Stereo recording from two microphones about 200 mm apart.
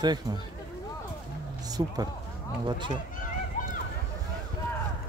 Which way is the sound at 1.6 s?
20° right (ahead or behind).